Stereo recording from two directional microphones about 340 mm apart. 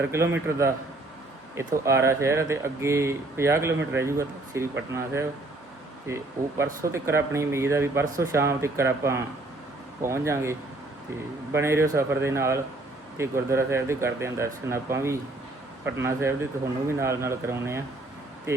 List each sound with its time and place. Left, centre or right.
0.0 s speech: centre